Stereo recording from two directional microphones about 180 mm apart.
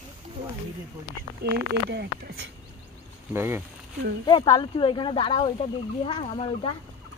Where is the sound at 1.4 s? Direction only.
70° right (ahead or behind).